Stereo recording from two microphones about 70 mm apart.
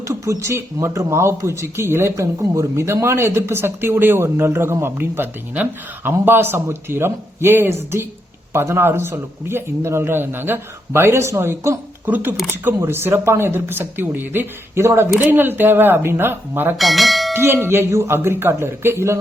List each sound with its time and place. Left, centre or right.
0.1 s speech: right
2.2 s speech: right
12.0 s speech: right
14.8 s speech: right
15.3 s speech: right
16.7 s speech: centre
17.3 s speech: right